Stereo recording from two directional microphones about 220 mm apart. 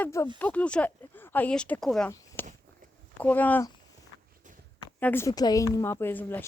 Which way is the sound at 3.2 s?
5° left (ahead or behind).